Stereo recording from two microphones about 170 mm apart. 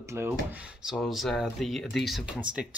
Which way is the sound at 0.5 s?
5° right (ahead or behind).